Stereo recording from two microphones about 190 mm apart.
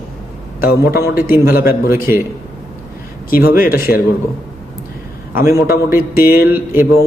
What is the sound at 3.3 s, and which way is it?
Speech, 50° left (ahead or behind).